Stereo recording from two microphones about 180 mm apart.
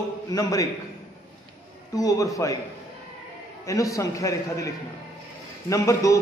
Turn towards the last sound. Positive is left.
turn(degrees=15)  # may be behind; listen again after turning